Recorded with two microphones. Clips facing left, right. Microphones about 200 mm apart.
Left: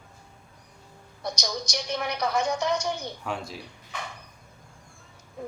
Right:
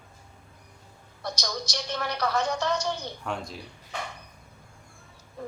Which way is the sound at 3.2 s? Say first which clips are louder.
Even; centre (ahead or behind).